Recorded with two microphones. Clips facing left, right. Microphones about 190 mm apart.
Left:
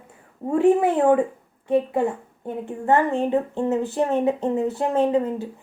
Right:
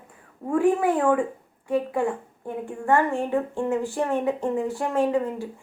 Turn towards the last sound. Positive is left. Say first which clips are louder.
# left 3 dB
turn(degrees=20)  # may be behind; listen again after turning